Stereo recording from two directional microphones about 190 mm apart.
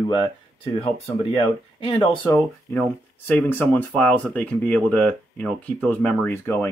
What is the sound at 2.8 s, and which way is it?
Speech, 10° left (ahead or behind).